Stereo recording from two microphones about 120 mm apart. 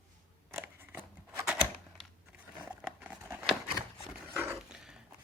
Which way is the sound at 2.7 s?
10° right (ahead or behind).